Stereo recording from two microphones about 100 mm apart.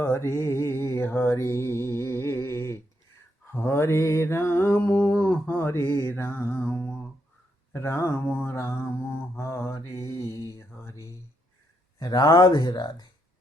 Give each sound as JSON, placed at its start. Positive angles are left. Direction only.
{"t": 0.0, "sound": "mantra", "side_deg": 25}
{"t": 10.3, "sound": "a sound", "side_deg": 35}
{"t": 11.9, "sound": "speech", "side_deg": 40}